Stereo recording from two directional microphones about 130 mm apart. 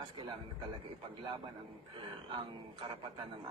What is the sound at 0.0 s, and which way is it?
Speech, 40° right (ahead or behind).